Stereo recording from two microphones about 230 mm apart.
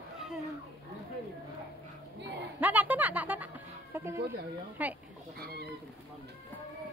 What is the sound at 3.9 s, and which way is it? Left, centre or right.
Speech, centre.